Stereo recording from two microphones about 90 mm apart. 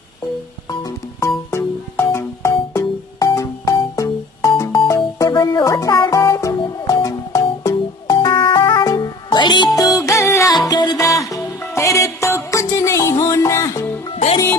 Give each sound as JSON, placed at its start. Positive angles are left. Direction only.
{"t": 0.8, "sound": "music", "side_deg": 30}
{"t": 5.3, "sound": "music", "side_deg": 50}
{"t": 8.3, "sound": "music", "side_deg": 60}
{"t": 8.8, "sound": "music", "side_deg": 45}
{"t": 9.8, "sound": "music", "side_deg": 40}
{"t": 10.7, "sound": "music", "side_deg": 55}
{"t": 11.0, "sound": "music", "side_deg": 35}